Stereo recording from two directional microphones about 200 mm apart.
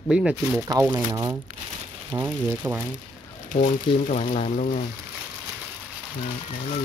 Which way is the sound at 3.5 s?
40° left (ahead or behind).